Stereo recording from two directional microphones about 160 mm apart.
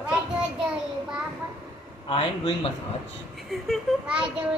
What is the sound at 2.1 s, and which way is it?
Speech, 35° left (ahead or behind).